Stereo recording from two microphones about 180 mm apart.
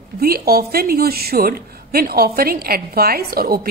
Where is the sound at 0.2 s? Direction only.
60° right (ahead or behind).